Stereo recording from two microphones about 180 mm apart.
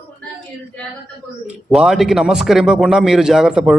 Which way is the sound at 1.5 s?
Centre (ahead or behind).